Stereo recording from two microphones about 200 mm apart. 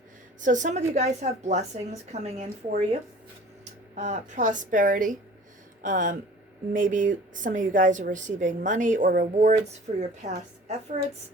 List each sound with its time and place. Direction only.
0.4 s a woman's voice: 40° right (ahead or behind)